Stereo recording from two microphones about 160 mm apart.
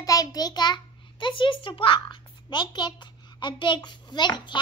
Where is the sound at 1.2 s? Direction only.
30° left (ahead or behind).